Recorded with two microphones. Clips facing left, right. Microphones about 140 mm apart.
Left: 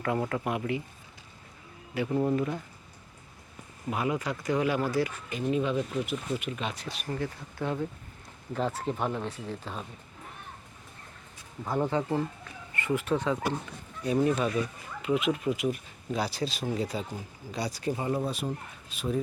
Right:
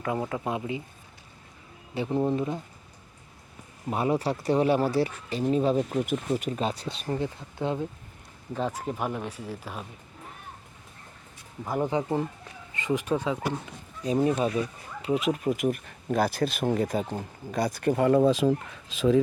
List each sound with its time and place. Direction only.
0.0 s speech: 10° right (ahead or behind)
2.0 s speech: 25° right (ahead or behind)
3.8 s speech: 35° right (ahead or behind)
8.5 s speech: 5° right (ahead or behind)
11.6 s speech: 5° right (ahead or behind)
11.9 s speech: 15° right (ahead or behind)
15.0 s speech: 35° right (ahead or behind); by 19.2 s 90° right